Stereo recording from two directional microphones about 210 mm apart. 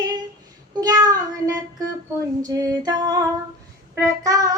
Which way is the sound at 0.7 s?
20° right (ahead or behind).